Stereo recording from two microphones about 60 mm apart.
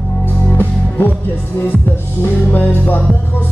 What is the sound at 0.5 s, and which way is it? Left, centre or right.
Music, left.